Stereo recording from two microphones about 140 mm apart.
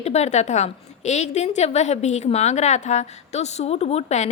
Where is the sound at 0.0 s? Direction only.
50° left (ahead or behind).